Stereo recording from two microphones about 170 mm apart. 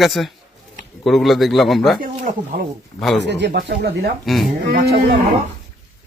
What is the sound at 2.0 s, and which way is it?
Speech, 60° right (ahead or behind).